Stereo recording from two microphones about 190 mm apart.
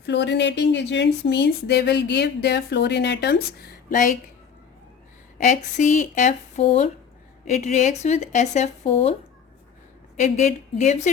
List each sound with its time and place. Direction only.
0.0 s speech: 65° left (ahead or behind); by 4.1 s 50° left (ahead or behind)
5.4 s speech: 40° left (ahead or behind)
10.2 s speech: 40° left (ahead or behind)